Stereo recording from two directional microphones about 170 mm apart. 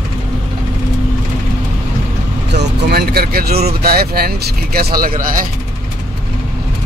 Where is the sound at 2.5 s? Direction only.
70° right (ahead or behind); by 5.4 s 50° right (ahead or behind).